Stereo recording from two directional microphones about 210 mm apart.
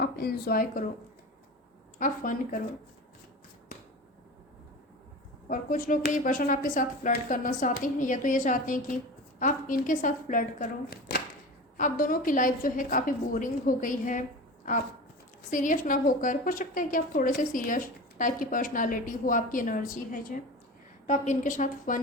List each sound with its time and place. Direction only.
0.0 s speech: 50° left (ahead or behind)
2.0 s a woman's voice: 40° left (ahead or behind)
5.5 s a woman's voice: 40° left (ahead or behind)